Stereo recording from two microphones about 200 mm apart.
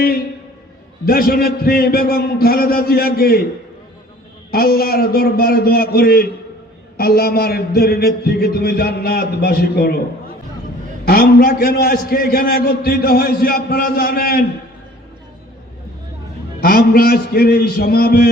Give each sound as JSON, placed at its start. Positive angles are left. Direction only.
{"t": 1.0, "sound": "a man's voice", "side_deg": 50}
{"t": 4.5, "sound": "a man's voice", "side_deg": 50}
{"t": 16.6, "sound": "a man's voice", "side_deg": 45}